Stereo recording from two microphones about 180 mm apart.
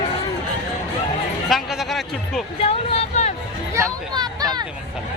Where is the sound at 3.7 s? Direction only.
20° right (ahead or behind).